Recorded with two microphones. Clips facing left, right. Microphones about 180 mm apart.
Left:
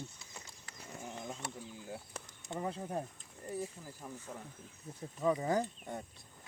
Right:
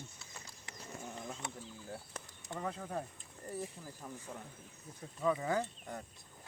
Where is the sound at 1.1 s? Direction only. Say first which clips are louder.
Left 3 dB; 5° left (ahead or behind).